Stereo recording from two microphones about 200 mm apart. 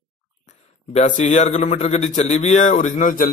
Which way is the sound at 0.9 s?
35° left (ahead or behind).